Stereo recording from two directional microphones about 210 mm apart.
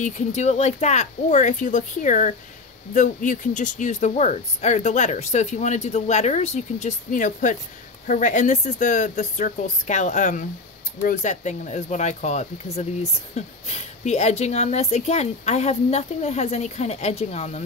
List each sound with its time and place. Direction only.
0.0 s speech: 35° left (ahead or behind)